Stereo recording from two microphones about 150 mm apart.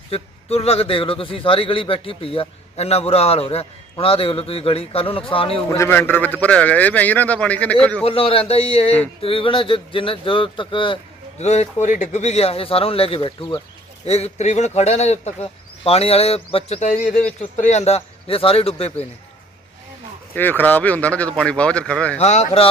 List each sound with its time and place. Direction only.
0.1 s a man's voice: 40° left (ahead or behind)
5.7 s a man's voice: 15° left (ahead or behind)
8.0 s a man's voice: 40° left (ahead or behind)
11.3 s a man's voice: 45° left (ahead or behind)
17.2 s speech: 55° left (ahead or behind)
20.3 s a man's voice: 10° left (ahead or behind)
22.2 s speech: 50° left (ahead or behind)